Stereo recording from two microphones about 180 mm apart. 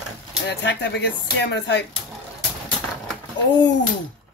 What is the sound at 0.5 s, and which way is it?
Speech, 75° left (ahead or behind).